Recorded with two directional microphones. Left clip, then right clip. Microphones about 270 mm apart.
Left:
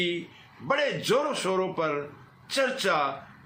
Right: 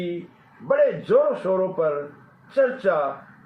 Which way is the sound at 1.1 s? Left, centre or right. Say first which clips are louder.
Right 6 dB; left.